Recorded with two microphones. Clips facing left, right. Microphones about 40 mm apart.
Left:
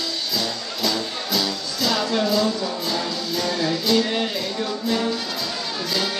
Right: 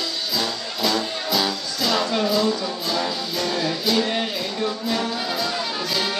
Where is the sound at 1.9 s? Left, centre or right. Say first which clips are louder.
Even; centre.